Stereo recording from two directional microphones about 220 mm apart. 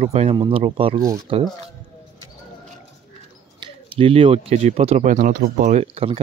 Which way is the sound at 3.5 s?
25° right (ahead or behind).